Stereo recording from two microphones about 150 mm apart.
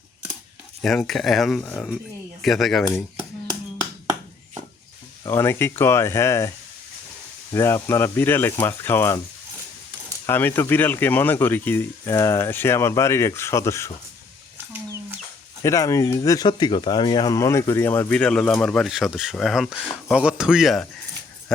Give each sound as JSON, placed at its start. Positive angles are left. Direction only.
{"t": 0.8, "sound": "speech", "side_deg": 5}
{"t": 5.2, "sound": "speech", "side_deg": 15}
{"t": 7.5, "sound": "speech", "side_deg": 20}
{"t": 10.2, "sound": "speech", "side_deg": 15}
{"t": 15.6, "sound": "speech", "side_deg": 20}